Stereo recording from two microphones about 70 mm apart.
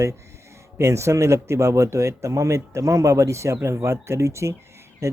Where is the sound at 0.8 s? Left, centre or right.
Right.